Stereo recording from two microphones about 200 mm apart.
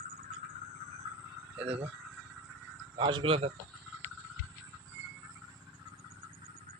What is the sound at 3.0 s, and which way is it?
Speech, 25° right (ahead or behind).